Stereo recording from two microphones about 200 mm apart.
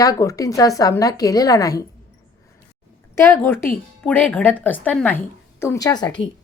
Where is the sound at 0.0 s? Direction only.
15° left (ahead or behind).